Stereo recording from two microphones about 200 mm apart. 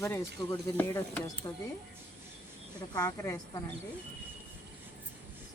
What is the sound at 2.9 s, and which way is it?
Speech, 20° left (ahead or behind).